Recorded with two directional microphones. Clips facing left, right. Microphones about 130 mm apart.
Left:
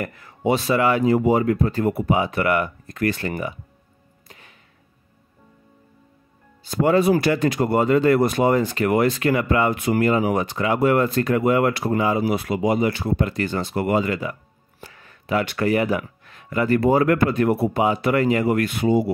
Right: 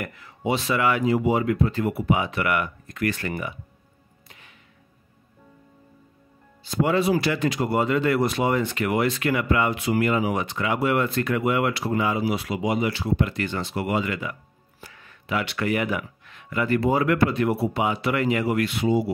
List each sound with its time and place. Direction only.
0.0 s speech: 45° left (ahead or behind)
1.1 s speech: 45° left (ahead or behind)
4.3 s music: 40° left (ahead or behind)
6.6 s speech: 45° left (ahead or behind)
9.8 s speech: 50° left (ahead or behind)
10.0 s speech: 40° left (ahead or behind)